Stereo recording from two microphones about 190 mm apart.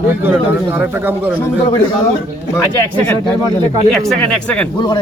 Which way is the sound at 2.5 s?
10° left (ahead or behind).